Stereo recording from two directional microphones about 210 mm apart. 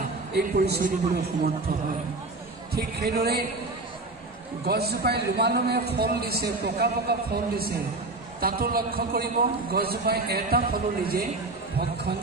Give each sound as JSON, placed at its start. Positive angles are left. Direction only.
{"t": 0.0, "sound": "a man's voice", "side_deg": -45}
{"t": 2.7, "sound": "a man's voice", "side_deg": -50}
{"t": 4.6, "sound": "a man's voice", "side_deg": -50}